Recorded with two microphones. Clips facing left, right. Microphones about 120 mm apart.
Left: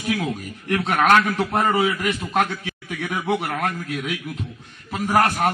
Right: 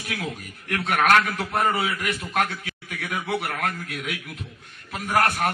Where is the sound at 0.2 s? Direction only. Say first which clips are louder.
Left 6 dB; 30° left (ahead or behind).